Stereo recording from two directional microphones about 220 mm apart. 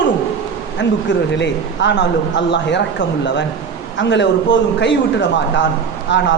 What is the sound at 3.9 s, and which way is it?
A man's voice, 55° left (ahead or behind).